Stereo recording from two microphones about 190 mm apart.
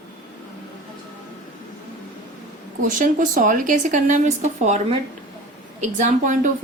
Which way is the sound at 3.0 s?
45° right (ahead or behind).